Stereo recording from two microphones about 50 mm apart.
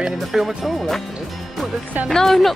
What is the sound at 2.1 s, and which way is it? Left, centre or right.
Speech, centre.